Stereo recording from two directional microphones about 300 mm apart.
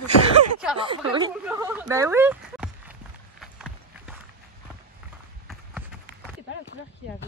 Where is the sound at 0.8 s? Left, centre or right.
Centre.